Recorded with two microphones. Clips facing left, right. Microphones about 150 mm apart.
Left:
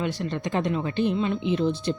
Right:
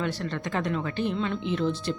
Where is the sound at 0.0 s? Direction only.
15° left (ahead or behind).